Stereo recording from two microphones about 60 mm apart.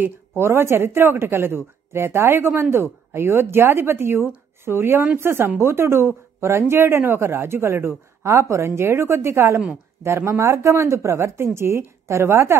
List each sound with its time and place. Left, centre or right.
0.4 s speech: right